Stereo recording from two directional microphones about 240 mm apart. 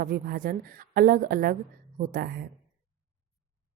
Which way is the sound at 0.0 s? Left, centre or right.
Right.